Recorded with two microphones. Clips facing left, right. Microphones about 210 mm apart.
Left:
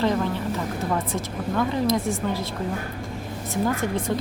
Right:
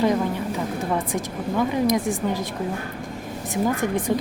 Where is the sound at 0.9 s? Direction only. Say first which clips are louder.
Right 1 dB; 15° right (ahead or behind).